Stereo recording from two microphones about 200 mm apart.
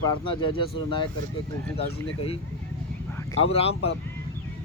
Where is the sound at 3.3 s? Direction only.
30° left (ahead or behind).